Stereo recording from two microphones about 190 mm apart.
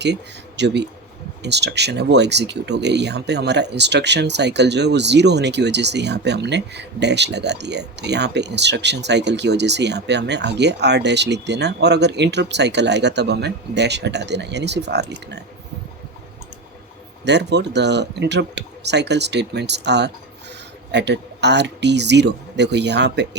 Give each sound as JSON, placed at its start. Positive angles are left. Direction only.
{"t": 0.0, "sound": "speech", "side_deg": -65}
{"t": 17.2, "sound": "speech", "side_deg": -65}